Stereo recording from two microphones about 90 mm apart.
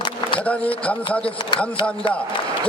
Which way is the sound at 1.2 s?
70° left (ahead or behind).